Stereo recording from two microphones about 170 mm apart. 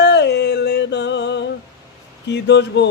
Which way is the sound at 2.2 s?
90° left.